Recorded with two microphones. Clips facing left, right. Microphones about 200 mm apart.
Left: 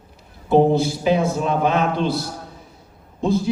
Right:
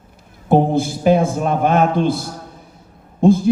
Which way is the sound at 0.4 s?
50° right (ahead or behind).